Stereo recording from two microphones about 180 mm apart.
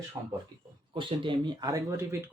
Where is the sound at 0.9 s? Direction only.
25° right (ahead or behind).